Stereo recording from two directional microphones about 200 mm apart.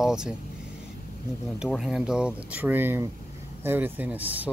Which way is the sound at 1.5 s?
5° right (ahead or behind).